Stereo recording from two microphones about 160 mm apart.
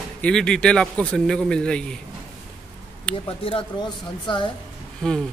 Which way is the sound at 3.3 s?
35° left (ahead or behind).